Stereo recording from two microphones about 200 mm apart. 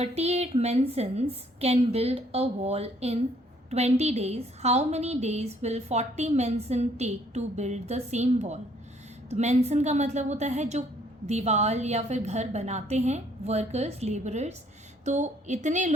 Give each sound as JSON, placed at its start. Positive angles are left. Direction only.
{"t": 0.0, "sound": "a woman's voice", "side_deg": -30}